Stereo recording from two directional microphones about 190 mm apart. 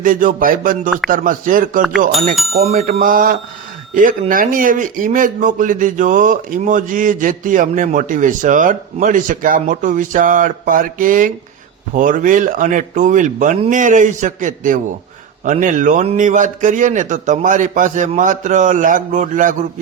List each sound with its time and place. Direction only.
0.0 s a man's voice: 45° right (ahead or behind)